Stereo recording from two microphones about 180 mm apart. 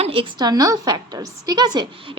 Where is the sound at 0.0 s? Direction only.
30° right (ahead or behind).